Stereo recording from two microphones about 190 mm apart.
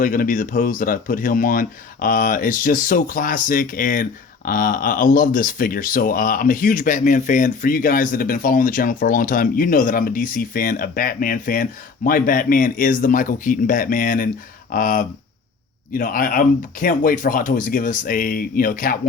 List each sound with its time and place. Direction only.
0.0 s speech: 45° left (ahead or behind)